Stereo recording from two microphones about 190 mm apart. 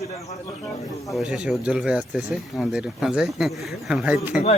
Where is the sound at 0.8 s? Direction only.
Centre (ahead or behind).